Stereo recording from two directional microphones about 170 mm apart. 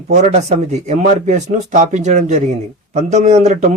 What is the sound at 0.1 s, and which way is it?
A man's voice, 40° right (ahead or behind).